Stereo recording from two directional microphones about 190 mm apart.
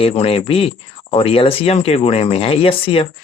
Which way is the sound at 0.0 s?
30° left (ahead or behind).